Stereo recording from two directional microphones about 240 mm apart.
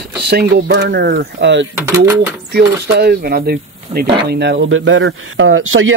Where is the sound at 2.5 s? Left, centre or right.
Right.